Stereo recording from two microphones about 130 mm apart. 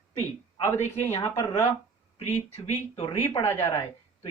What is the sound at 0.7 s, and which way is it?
Speech, 20° left (ahead or behind).